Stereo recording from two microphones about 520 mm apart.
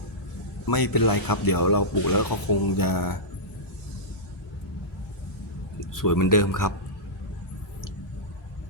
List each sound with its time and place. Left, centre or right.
0.7 s speech: left
5.9 s speech: left